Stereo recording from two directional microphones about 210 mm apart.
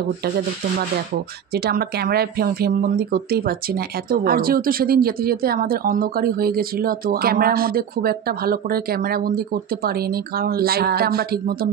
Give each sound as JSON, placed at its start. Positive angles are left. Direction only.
{"t": 1.5, "sound": "speech", "side_deg": -45}